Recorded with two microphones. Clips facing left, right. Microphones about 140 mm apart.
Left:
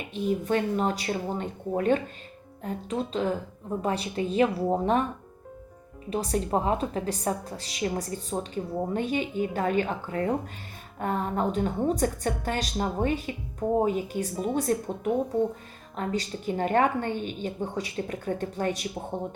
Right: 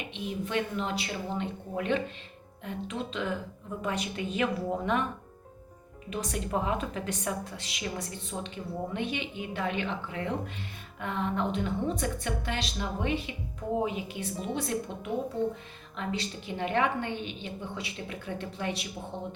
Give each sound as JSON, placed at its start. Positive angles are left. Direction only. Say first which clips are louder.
{"t": 0.1, "sound": "a woman's voice", "louder": "left 8 dB", "side_deg": 40}
{"t": 6.1, "sound": "a woman's voice", "louder": "left 6 dB", "side_deg": 35}